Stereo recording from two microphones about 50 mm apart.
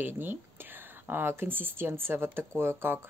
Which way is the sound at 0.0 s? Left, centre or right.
Right.